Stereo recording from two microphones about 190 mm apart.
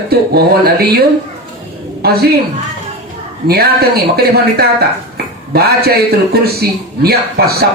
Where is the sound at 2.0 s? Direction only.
55° right (ahead or behind).